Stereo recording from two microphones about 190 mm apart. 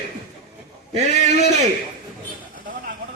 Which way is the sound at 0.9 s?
35° right (ahead or behind).